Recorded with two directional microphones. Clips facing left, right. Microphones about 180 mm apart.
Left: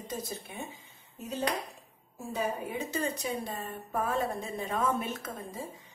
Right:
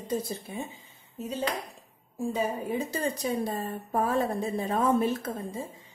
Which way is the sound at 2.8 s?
35° right (ahead or behind).